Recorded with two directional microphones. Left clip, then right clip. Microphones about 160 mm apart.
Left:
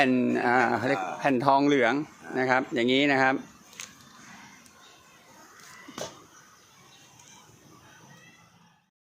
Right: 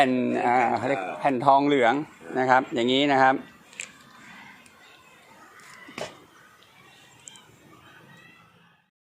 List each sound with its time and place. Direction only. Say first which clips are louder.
0.1 s speech: right 1 dB; 30° left (ahead or behind)
1.8 s speech: right 3 dB; 10° left (ahead or behind)